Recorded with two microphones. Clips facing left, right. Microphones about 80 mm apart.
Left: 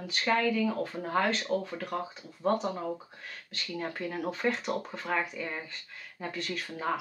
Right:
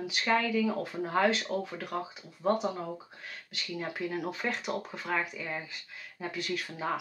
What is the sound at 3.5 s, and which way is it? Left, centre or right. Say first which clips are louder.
Speech: left 1 dB; centre.